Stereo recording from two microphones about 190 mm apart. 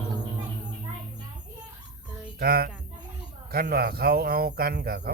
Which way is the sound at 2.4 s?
55° right (ahead or behind).